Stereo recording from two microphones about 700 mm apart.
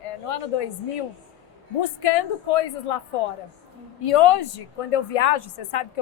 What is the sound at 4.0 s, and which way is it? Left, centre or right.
Speech, left.